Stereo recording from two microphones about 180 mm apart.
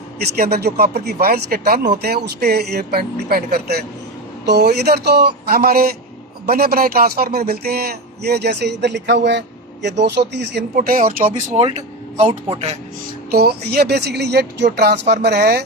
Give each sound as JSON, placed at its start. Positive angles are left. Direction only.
{"t": 0.3, "sound": "speech", "side_deg": -60}
{"t": 10.8, "sound": "speech", "side_deg": -50}
{"t": 11.4, "sound": "speech", "side_deg": -40}
{"t": 12.3, "sound": "speech", "side_deg": -25}
{"t": 13.3, "sound": "speech", "side_deg": -60}